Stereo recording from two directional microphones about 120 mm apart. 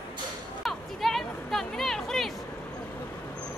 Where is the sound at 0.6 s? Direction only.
Centre (ahead or behind).